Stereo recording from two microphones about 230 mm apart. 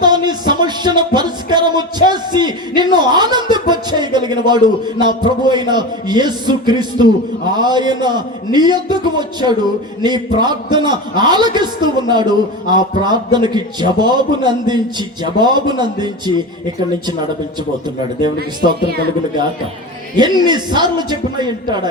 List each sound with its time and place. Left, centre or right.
0.0 s music: centre
10.0 s a man's voice: centre
20.1 s a man's voice: centre